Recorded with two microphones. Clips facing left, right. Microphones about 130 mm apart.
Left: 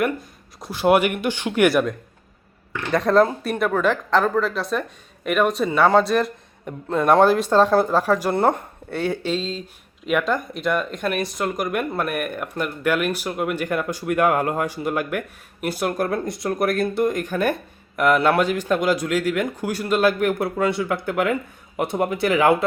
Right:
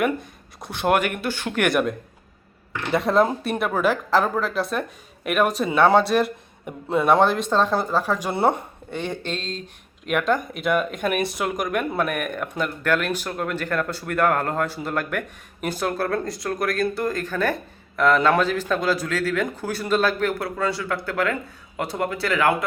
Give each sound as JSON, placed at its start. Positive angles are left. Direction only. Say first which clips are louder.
{"t": 0.6, "sound": "speech", "louder": "left 4 dB", "side_deg": 0}